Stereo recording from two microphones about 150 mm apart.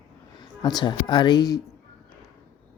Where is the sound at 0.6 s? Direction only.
30° left (ahead or behind).